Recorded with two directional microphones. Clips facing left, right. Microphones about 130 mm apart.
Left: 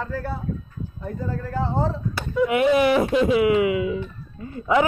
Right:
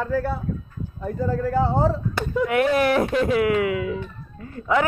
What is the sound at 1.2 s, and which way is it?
Speech, 70° right (ahead or behind).